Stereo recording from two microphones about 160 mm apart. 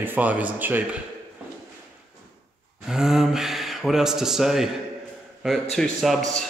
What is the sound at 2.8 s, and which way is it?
Speech, 5° right (ahead or behind).